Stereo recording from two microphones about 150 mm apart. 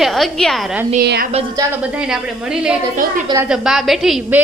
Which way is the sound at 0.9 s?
80° right.